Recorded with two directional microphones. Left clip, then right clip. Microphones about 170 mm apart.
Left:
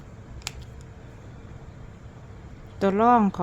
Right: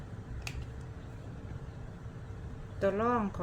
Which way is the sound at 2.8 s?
80° left.